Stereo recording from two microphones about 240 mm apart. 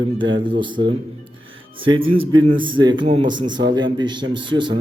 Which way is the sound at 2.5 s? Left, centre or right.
Centre.